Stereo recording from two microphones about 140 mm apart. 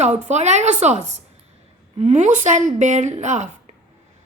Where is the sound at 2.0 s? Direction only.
55° right (ahead or behind).